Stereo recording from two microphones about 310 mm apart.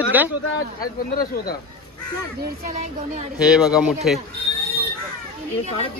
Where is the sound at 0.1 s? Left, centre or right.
Centre.